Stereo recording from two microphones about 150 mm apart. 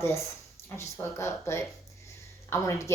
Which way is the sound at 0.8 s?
20° left (ahead or behind).